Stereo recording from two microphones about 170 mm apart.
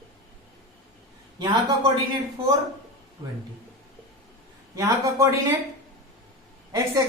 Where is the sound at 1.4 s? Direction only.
25° right (ahead or behind).